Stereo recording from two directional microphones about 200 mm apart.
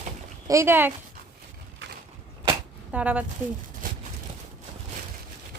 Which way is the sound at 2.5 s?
5° right (ahead or behind).